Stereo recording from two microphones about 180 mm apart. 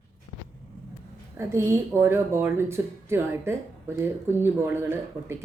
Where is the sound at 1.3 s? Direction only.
15° right (ahead or behind).